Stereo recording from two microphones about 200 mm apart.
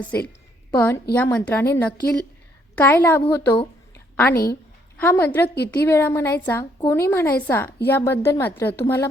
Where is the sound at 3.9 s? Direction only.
10° left (ahead or behind).